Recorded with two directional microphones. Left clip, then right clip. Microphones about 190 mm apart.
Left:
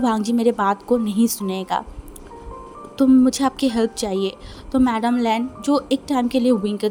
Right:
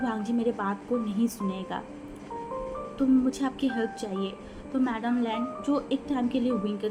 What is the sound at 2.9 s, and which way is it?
A woman's voice, 55° left (ahead or behind).